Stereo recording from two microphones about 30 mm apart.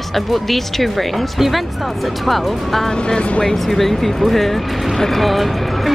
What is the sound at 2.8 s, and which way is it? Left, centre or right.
Speech, left.